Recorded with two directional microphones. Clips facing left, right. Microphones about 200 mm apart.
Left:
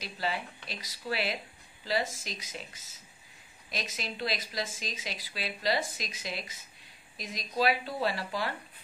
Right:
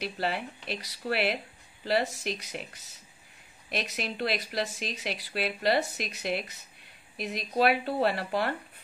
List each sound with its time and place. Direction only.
0.0 s speech: 60° right (ahead or behind)